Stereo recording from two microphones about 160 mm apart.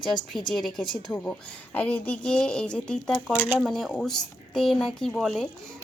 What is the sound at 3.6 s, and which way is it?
Speech, centre (ahead or behind).